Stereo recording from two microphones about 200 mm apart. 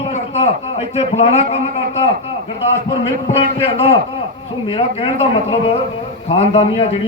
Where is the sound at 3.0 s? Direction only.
30° left (ahead or behind).